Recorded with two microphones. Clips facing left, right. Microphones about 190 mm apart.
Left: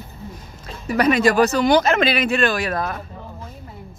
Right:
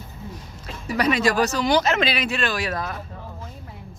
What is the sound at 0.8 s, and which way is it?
Speech, 50° left (ahead or behind).